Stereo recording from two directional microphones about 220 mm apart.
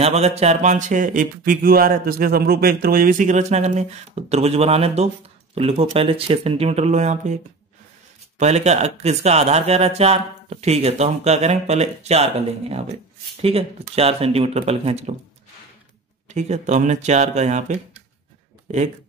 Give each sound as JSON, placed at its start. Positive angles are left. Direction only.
{"t": 0.0, "sound": "speech", "side_deg": -30}
{"t": 8.4, "sound": "speech", "side_deg": -30}
{"t": 16.3, "sound": "speech", "side_deg": -30}